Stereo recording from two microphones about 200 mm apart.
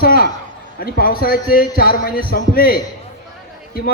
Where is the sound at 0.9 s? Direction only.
50° left (ahead or behind).